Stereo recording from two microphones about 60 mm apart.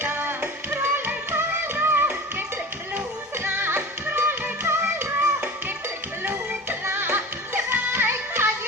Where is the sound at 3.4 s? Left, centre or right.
Right.